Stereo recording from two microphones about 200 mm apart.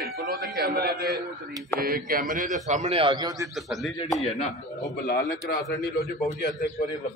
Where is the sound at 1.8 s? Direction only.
45° right (ahead or behind); by 3.4 s 20° right (ahead or behind).